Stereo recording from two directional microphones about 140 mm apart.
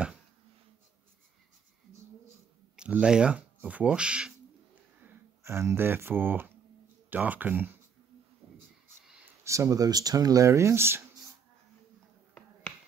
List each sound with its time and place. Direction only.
2.7 s speech: 5° right (ahead or behind)
5.0 s speech: 20° right (ahead or behind)
9.0 s a sound: 5° right (ahead or behind)
9.4 s speech: 20° right (ahead or behind)